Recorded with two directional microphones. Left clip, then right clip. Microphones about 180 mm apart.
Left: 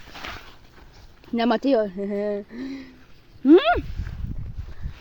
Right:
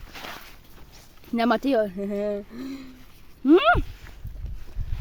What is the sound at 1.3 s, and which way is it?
Speech, 15° right (ahead or behind).